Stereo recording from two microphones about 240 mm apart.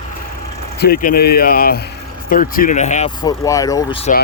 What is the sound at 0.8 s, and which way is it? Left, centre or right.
Speech, left.